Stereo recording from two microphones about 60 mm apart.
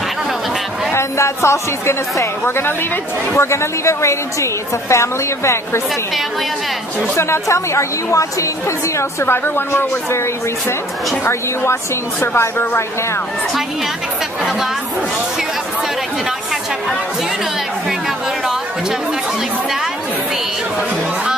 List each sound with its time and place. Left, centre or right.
0.9 s a woman's voice: left
7.2 s a woman's voice: left
11.2 s a woman's voice: left